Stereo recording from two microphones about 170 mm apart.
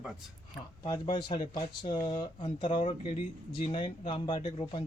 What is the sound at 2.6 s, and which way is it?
A man's voice, 45° left (ahead or behind).